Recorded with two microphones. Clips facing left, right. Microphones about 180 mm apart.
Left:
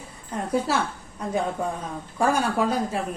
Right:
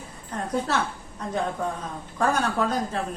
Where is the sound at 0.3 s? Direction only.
10° left (ahead or behind).